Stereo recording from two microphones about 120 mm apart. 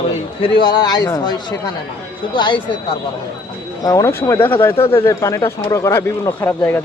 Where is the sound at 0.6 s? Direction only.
35° left (ahead or behind).